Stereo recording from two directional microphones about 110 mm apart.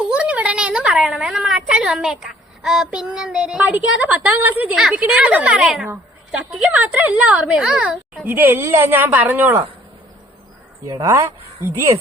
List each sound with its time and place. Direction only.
0.1 s a woman's voice: 10° right (ahead or behind)
4.7 s speech: 5° right (ahead or behind)
8.3 s a woman's voice: 20° right (ahead or behind)
10.8 s a woman's voice: 30° right (ahead or behind)